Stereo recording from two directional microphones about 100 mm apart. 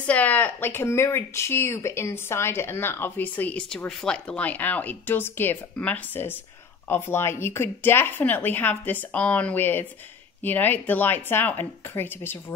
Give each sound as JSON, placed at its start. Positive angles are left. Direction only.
{"t": 0.0, "sound": "speech", "side_deg": 15}